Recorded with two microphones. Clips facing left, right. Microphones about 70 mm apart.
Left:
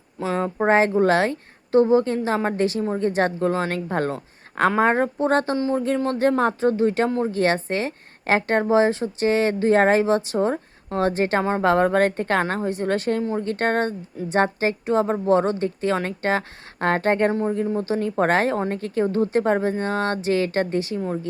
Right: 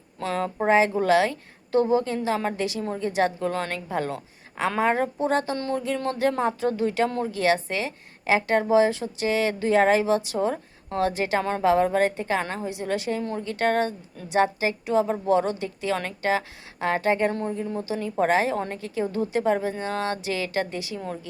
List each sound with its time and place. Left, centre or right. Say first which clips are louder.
0.3 s speech: left 3 dB; left
0.7 s a woman's voice: left 2 dB; left